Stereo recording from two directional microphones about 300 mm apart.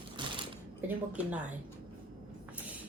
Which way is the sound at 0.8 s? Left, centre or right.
Centre.